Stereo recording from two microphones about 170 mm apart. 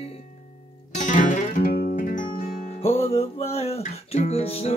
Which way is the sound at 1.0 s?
50° left (ahead or behind).